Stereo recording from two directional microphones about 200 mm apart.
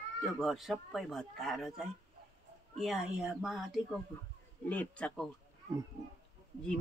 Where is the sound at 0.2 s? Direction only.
Centre (ahead or behind).